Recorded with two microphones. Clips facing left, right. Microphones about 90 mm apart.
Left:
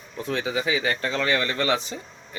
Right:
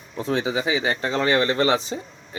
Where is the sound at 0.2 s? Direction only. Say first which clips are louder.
Right 3 dB; 30° right (ahead or behind).